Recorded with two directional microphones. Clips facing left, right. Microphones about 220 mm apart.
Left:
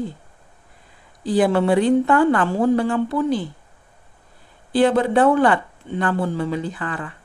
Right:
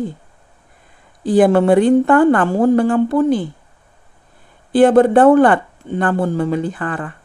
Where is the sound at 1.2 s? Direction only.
50° right (ahead or behind).